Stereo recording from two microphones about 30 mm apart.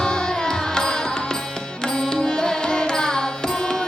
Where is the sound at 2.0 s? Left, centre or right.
Left.